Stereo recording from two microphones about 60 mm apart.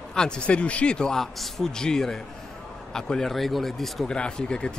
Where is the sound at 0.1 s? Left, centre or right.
Centre.